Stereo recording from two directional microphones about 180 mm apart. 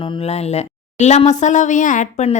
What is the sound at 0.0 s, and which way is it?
Speech, 30° left (ahead or behind).